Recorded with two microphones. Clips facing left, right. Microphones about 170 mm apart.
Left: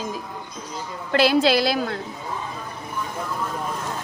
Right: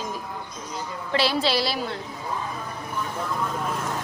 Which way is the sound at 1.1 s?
50° left (ahead or behind).